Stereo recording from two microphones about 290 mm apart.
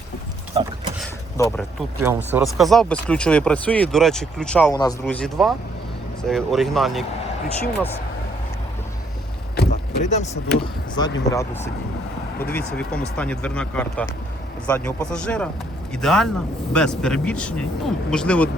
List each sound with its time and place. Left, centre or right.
0.6 s a sound: centre
1.4 s speech: centre
2.0 s speech: centre
9.6 s rowboat: left
10.6 s speech: centre